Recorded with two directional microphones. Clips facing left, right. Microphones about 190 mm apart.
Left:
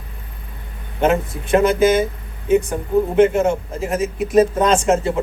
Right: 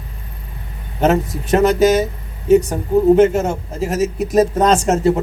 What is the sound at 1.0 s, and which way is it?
A man's voice, 40° right (ahead or behind).